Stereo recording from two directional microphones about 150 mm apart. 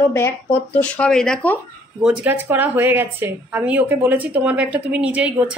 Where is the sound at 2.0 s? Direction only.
10° right (ahead or behind).